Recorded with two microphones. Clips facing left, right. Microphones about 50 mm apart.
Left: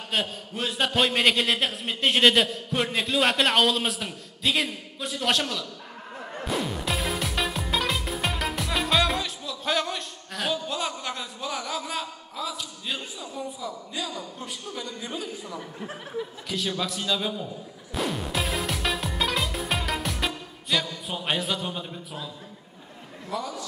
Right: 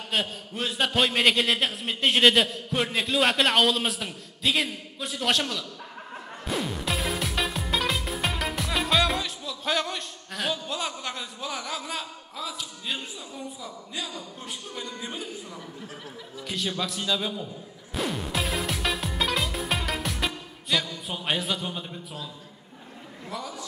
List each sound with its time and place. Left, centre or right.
0.1 s a man's voice: centre
6.4 s music: centre
13.6 s a man's voice: centre
15.5 s speech: left
16.4 s a man's voice: centre
17.9 s music: centre
23.3 s a man's voice: centre